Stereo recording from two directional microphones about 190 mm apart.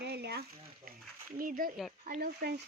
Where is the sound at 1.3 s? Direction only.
45° right (ahead or behind).